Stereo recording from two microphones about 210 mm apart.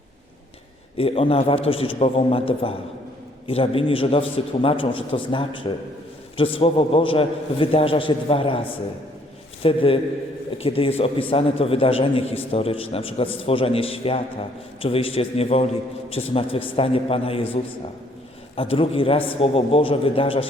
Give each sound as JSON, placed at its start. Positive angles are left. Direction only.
{"t": 0.9, "sound": "a man's voice", "side_deg": 25}